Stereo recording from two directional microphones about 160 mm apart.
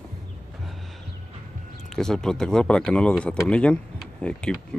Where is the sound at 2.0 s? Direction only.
5° left (ahead or behind).